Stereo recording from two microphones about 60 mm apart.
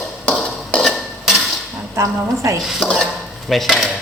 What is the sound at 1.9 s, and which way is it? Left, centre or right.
Speech, right.